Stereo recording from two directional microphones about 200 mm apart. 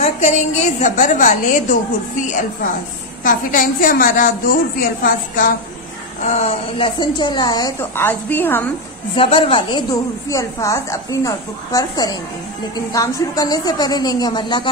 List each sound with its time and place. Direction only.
0.0 s a woman's voice: 35° left (ahead or behind)
3.3 s a woman's voice: 45° left (ahead or behind)
6.2 s a woman's voice: 30° left (ahead or behind); by 8.6 s 10° left (ahead or behind)
9.1 s a woman's voice: 25° left (ahead or behind)